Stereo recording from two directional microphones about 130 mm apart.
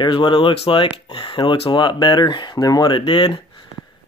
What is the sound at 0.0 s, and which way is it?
Speech, 35° left (ahead or behind).